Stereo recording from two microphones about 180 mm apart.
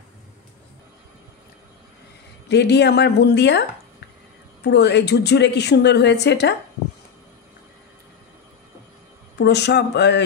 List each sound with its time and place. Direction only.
2.4 s speech: 65° left (ahead or behind)
9.4 s speech: 70° left (ahead or behind)